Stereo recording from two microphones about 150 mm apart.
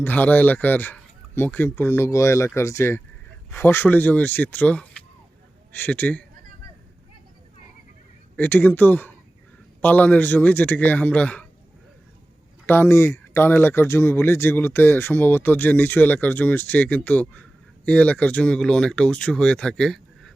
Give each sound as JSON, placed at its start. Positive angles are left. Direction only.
{"t": 0.0, "sound": "speech", "side_deg": 10}
{"t": 8.4, "sound": "speech", "side_deg": 10}
{"t": 12.6, "sound": "speech", "side_deg": 15}